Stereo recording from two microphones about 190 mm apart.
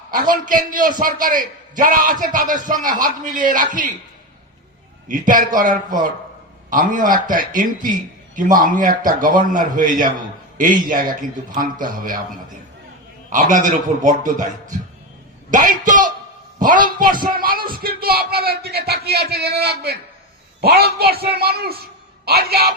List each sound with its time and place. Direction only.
0.1 s a man's voice: 45° right (ahead or behind)
5.0 s a man's voice: 45° right (ahead or behind)
13.3 s a man's voice: 40° right (ahead or behind)